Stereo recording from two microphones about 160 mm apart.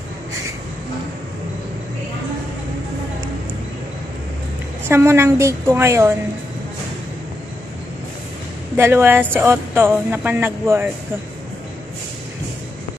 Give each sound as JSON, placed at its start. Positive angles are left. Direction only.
{"t": 4.8, "sound": "speech", "side_deg": -15}
{"t": 8.7, "sound": "speech", "side_deg": -15}